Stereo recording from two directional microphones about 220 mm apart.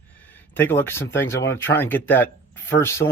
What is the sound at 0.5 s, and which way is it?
Speech, 10° left (ahead or behind).